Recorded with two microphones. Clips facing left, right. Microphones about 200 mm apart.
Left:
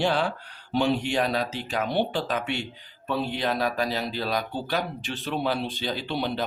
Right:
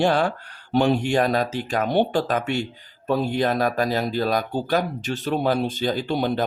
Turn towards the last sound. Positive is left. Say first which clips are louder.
# right 6 dB
turn(degrees=-45)  # may be behind; listen again after turning